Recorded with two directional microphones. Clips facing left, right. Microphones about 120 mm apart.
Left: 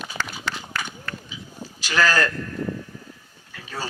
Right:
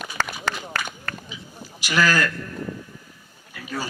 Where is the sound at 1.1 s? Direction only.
45° right (ahead or behind).